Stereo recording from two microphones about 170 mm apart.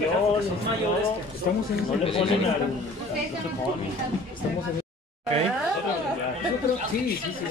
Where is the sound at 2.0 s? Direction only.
35° left (ahead or behind).